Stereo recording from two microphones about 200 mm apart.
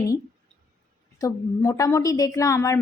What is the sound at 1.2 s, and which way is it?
A woman's voice, 15° left (ahead or behind).